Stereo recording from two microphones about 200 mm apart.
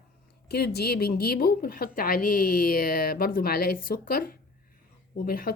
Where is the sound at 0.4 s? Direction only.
55° left (ahead or behind).